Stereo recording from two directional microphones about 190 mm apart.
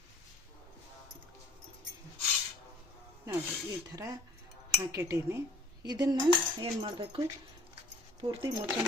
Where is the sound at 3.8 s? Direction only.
20° right (ahead or behind).